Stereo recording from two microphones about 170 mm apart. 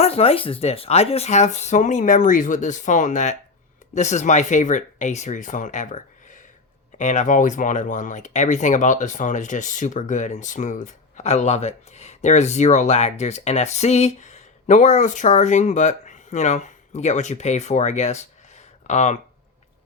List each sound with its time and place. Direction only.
0.0 s speech: 35° left (ahead or behind)